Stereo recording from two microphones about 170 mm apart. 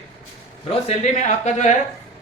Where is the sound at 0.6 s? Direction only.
40° left (ahead or behind).